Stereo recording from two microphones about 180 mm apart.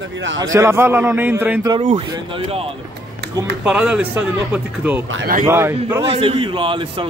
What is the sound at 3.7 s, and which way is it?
Speech, 5° right (ahead or behind).